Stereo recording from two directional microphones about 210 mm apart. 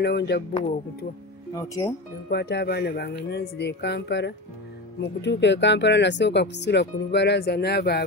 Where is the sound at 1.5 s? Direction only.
15° left (ahead or behind).